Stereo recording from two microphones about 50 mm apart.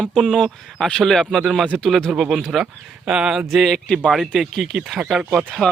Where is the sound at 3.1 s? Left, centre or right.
Centre.